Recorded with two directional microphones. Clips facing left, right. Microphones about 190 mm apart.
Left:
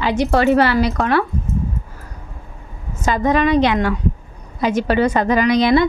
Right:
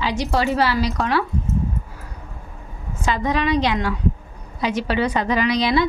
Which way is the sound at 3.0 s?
45° left (ahead or behind).